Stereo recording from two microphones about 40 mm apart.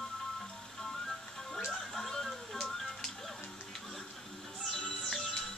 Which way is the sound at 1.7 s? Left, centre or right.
Centre.